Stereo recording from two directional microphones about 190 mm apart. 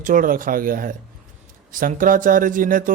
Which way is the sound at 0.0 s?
45° right (ahead or behind).